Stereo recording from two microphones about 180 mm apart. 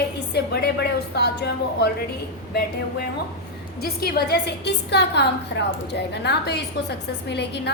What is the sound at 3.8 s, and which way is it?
A woman's voice, 60° left (ahead or behind).